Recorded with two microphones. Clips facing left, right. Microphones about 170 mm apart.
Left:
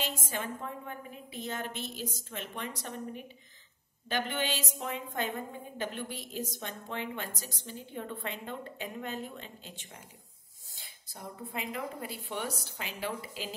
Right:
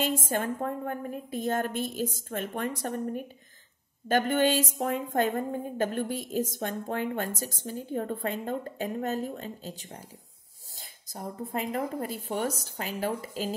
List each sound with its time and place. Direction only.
0.0 s a woman's voice: 50° right (ahead or behind)